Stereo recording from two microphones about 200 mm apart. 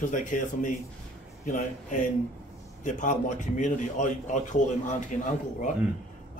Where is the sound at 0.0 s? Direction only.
40° left (ahead or behind).